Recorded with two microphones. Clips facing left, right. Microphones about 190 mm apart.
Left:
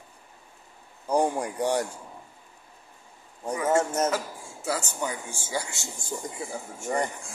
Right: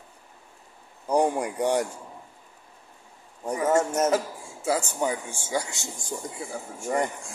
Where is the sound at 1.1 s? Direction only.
20° right (ahead or behind).